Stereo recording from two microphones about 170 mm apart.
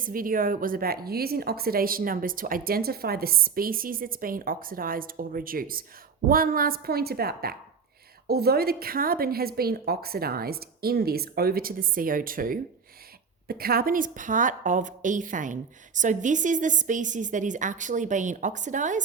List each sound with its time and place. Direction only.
0.0 s a woman's voice: 55° right (ahead or behind)